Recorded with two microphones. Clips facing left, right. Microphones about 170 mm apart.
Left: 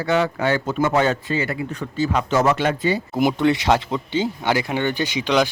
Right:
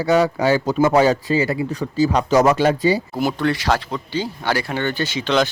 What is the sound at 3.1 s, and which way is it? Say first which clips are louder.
Speech: left 2 dB; 20° left (ahead or behind).